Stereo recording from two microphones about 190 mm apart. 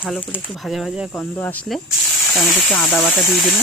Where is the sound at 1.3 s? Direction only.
10° left (ahead or behind).